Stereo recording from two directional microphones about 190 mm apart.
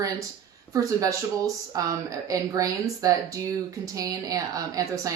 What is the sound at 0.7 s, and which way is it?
Speech, 15° right (ahead or behind).